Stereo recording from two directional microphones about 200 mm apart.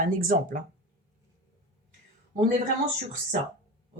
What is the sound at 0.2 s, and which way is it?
Speech, 45° right (ahead or behind).